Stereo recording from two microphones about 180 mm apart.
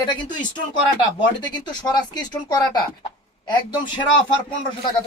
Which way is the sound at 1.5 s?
25° left (ahead or behind).